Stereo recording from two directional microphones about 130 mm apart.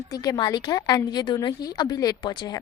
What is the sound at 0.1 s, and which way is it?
A woman's voice, 30° left (ahead or behind).